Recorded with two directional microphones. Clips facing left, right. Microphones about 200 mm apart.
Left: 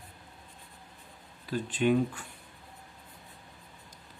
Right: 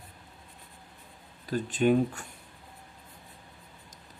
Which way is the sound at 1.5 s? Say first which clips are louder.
Right 2 dB; 45° right (ahead or behind).